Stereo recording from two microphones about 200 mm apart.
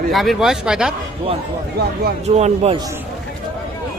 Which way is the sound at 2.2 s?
35° right (ahead or behind).